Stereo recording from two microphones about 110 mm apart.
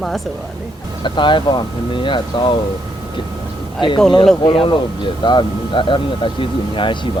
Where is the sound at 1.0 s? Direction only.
45° left (ahead or behind).